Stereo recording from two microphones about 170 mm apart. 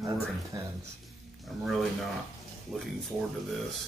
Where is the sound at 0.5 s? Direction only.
25° right (ahead or behind).